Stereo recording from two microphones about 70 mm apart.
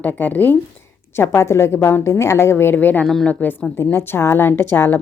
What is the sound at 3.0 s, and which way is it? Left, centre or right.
Speech, centre.